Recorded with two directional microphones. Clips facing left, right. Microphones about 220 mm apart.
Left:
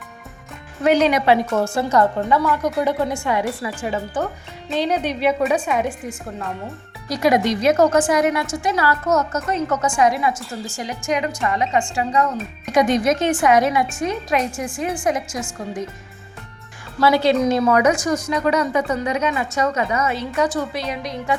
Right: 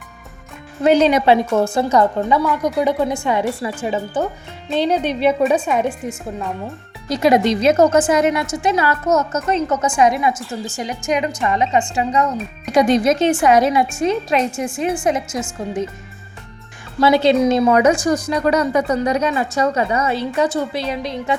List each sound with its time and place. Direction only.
0.9 s a woman's voice: 25° right (ahead or behind)
1.5 s a woman's voice: 15° right (ahead or behind)
17.0 s a woman's voice: 20° right (ahead or behind)